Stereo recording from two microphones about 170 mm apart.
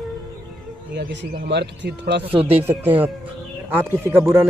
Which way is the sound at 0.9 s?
90° right.